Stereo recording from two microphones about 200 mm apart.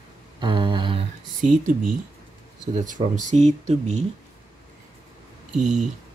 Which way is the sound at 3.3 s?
35° right (ahead or behind).